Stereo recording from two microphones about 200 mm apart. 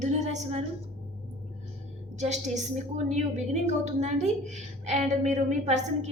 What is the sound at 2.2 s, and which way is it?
Speech, 35° right (ahead or behind).